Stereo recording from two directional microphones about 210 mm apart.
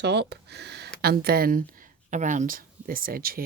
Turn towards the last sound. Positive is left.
turn(degrees=-45)  # may be behind; listen again after turning